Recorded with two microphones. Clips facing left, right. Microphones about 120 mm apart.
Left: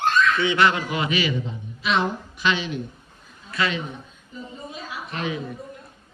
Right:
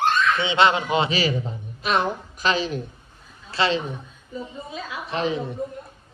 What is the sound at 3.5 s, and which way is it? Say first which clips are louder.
Speech: right 3 dB; 30° right (ahead or behind).